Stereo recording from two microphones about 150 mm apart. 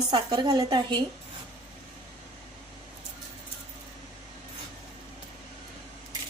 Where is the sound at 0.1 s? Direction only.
25° right (ahead or behind).